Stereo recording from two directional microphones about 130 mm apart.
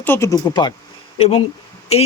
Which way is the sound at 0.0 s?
15° left (ahead or behind).